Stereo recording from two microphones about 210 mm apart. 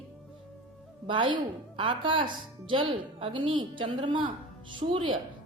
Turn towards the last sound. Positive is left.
turn(degrees=-25)  # may be behind; listen again after turning